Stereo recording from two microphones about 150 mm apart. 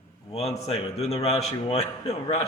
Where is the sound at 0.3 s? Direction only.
45° left (ahead or behind).